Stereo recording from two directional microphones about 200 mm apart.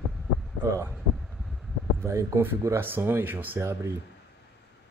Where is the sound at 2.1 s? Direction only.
15° right (ahead or behind).